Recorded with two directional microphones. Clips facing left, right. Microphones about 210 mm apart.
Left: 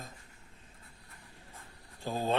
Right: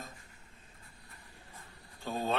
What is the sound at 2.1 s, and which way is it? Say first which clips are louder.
Mantra: left 2 dB; 30° left (ahead or behind).